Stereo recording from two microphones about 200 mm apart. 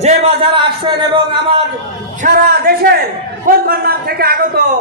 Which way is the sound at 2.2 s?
50° right (ahead or behind).